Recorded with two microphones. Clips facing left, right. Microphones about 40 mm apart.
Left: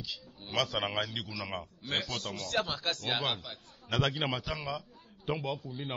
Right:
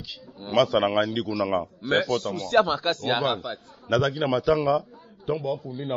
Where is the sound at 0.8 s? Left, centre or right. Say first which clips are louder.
Right 11 dB; right.